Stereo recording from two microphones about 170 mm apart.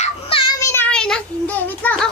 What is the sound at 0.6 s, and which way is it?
Child singing, 15° left (ahead or behind).